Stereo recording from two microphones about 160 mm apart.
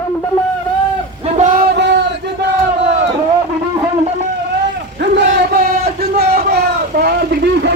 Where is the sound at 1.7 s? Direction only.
90° right.